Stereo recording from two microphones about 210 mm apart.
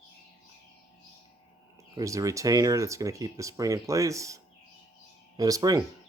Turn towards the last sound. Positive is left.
turn(degrees=-15)  # may be behind; listen again after turning